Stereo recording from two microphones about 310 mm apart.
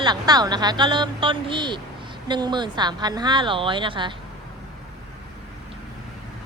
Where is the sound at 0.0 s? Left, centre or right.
Centre.